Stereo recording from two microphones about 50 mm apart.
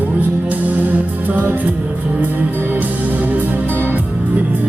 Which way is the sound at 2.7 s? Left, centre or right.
Right.